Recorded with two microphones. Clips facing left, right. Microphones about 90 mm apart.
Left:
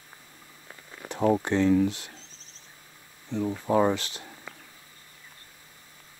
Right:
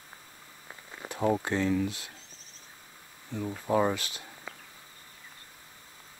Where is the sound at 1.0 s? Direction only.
20° right (ahead or behind).